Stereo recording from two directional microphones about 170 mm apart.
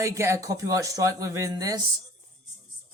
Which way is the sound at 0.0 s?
15° right (ahead or behind).